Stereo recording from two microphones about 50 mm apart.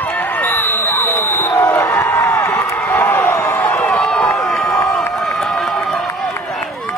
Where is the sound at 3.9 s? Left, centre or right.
Centre.